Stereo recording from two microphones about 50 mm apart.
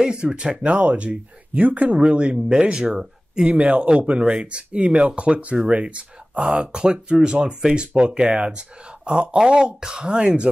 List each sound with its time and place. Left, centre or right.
0.0 s speech: centre
0.7 s speech: right
3.5 s speech: right